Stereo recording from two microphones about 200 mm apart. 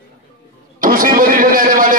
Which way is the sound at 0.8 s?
45° right (ahead or behind).